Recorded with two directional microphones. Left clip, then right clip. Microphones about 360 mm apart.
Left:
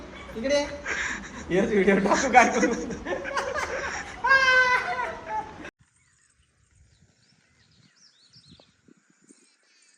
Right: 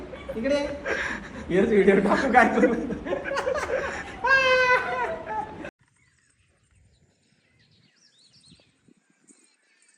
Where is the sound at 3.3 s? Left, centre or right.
Centre.